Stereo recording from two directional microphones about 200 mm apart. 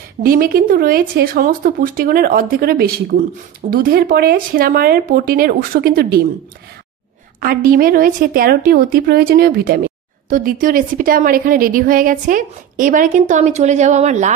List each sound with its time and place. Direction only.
0.2 s a woman's voice: 45° right (ahead or behind)
7.3 s a woman's voice: 45° right (ahead or behind)